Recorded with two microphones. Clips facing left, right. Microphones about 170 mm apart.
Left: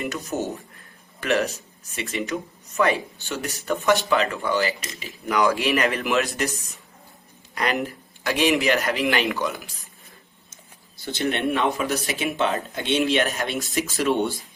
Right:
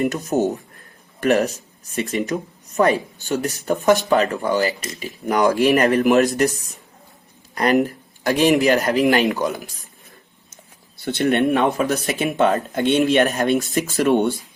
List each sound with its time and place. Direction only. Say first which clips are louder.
0.0 s a man's voice: right 8 dB; 50° right (ahead or behind)
7.5 s a man's voice: right 8 dB; 40° right (ahead or behind)
10.5 s speech: right 3 dB; 60° right (ahead or behind)